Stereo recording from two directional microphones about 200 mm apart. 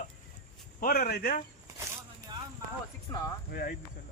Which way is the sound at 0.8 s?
45° left (ahead or behind).